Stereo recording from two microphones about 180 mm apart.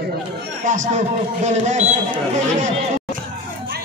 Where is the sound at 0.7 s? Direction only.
45° right (ahead or behind).